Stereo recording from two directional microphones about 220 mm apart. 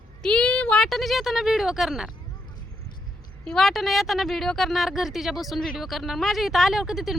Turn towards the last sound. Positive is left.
turn(degrees=0)  # may be behind; listen again after turning